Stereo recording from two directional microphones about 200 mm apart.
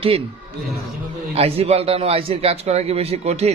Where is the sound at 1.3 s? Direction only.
30° right (ahead or behind).